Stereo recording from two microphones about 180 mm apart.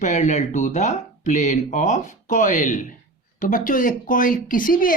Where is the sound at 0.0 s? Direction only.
40° left (ahead or behind).